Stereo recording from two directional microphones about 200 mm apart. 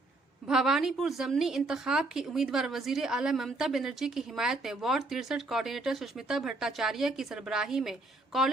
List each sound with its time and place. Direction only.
0.4 s a woman's voice: 5° right (ahead or behind)